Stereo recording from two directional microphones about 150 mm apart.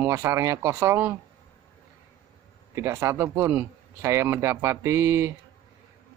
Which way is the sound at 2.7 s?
20° right (ahead or behind).